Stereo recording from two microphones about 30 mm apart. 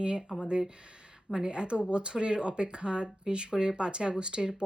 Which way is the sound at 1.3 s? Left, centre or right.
Right.